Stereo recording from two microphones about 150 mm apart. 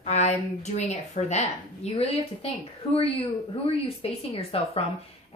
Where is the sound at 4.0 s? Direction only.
40° left (ahead or behind).